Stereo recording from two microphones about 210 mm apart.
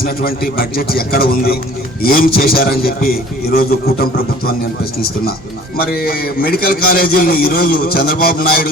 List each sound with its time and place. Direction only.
0.0 s a man's voice: 45° left (ahead or behind)
5.7 s a man's voice: 45° left (ahead or behind)